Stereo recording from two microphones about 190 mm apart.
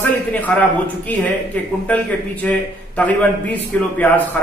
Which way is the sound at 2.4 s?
5° left (ahead or behind).